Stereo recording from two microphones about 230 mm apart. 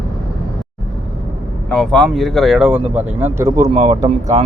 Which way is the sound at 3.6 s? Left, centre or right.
Right.